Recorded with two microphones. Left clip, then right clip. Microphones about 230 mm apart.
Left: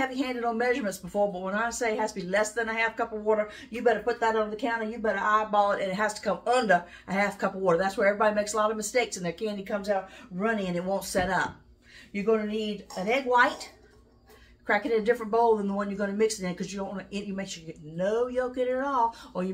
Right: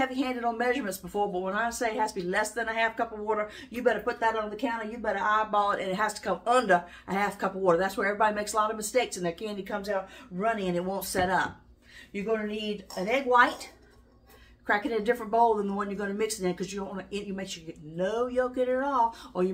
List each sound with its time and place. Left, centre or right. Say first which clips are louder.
0.0 s speech: even; centre
14.7 s speech: left 2 dB; centre